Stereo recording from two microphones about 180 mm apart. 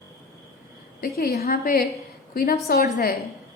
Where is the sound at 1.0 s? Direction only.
60° left (ahead or behind).